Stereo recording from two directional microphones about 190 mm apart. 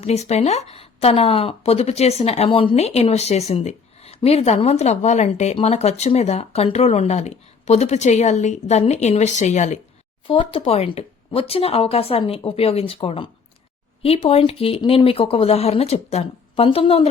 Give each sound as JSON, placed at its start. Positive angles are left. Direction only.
{"t": 0.0, "sound": "speech", "side_deg": 35}